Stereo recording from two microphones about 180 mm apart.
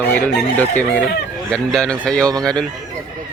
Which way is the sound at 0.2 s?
5° left (ahead or behind).